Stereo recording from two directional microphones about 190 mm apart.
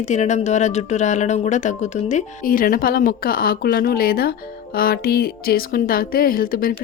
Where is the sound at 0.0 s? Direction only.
40° left (ahead or behind).